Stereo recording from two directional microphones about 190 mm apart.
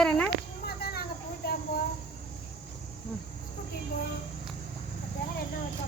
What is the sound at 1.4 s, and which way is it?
Cricket, 55° left (ahead or behind).